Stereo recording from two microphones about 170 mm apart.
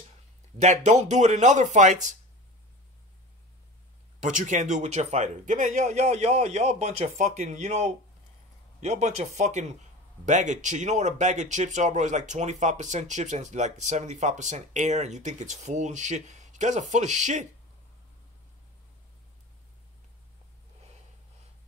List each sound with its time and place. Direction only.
0.6 s speech: 45° right (ahead or behind)
4.2 s speech: 45° right (ahead or behind)